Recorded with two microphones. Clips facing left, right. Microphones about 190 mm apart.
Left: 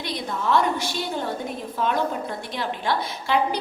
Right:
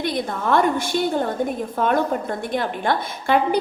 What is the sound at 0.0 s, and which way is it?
A woman's voice, 50° right (ahead or behind).